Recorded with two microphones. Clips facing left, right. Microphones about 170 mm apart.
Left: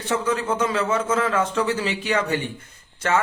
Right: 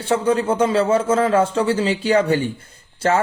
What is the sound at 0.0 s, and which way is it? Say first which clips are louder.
A man's voice: right 5 dB; 30° right (ahead or behind).